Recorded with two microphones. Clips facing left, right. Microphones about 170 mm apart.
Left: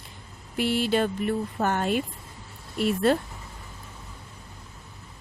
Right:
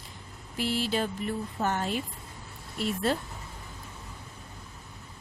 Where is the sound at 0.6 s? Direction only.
65° left (ahead or behind).